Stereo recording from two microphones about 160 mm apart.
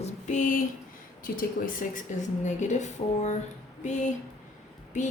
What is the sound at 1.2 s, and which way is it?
A woman's voice, 60° left (ahead or behind).